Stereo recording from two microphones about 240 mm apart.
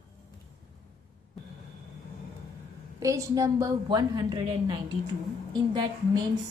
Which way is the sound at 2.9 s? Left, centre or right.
Centre.